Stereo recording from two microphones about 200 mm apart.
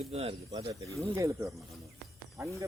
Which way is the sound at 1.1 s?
15° right (ahead or behind).